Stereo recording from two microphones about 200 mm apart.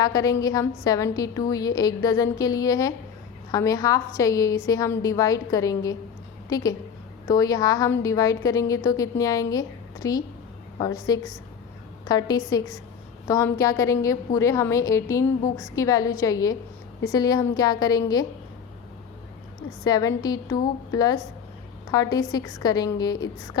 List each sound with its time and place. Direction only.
0.0 s a woman's voice: 20° left (ahead or behind)
19.8 s a woman's voice: 20° left (ahead or behind)